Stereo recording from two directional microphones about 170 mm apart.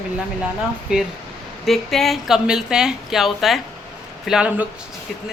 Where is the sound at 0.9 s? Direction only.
5° right (ahead or behind).